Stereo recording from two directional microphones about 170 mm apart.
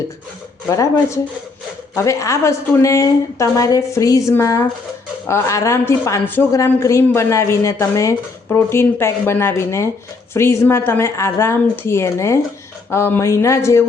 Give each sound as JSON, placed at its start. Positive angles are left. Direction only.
{"t": 0.7, "sound": "a woman's voice", "side_deg": 20}